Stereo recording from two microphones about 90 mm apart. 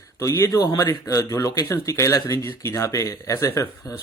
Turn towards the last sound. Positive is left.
turn(degrees=35)  # may be behind; listen again after turning